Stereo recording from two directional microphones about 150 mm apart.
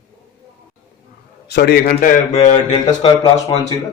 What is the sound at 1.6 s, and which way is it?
Speech, 90° left.